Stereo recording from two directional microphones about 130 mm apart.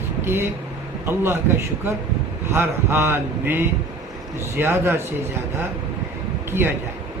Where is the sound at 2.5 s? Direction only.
20° right (ahead or behind).